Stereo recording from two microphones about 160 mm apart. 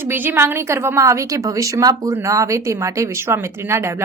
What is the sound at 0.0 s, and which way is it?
Speech, 15° right (ahead or behind).